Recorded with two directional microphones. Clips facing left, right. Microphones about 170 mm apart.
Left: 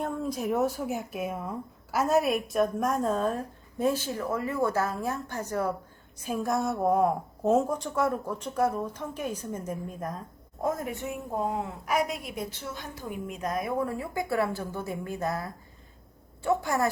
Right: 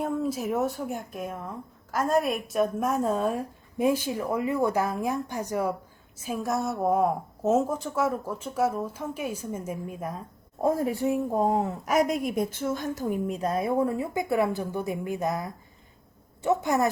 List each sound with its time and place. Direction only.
0.0 s a woman's voice: 5° right (ahead or behind)
6.1 s speech: centre (ahead or behind)
10.6 s a woman's voice: 30° right (ahead or behind)